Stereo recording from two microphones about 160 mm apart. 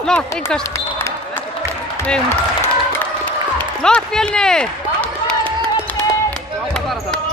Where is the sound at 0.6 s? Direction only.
20° left (ahead or behind).